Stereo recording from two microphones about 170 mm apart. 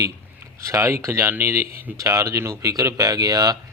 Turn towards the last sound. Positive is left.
turn(degrees=-20)  # may be behind; listen again after turning